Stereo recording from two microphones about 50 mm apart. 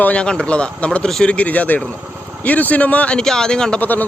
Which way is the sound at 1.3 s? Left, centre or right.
Left.